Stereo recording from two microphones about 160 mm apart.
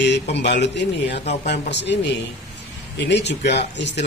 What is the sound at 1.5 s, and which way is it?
Speech, 90° left.